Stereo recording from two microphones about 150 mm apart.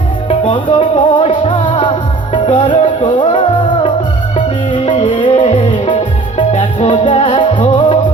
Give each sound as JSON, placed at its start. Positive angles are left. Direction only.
{"t": 0.3, "sound": "music", "side_deg": 35}